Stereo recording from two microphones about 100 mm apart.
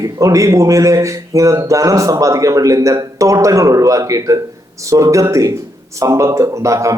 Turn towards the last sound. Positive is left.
turn(degrees=-30)  # may be behind; listen again after turning